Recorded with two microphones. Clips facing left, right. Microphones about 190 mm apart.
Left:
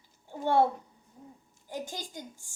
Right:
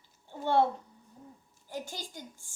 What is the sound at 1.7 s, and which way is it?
Speech, 15° left (ahead or behind).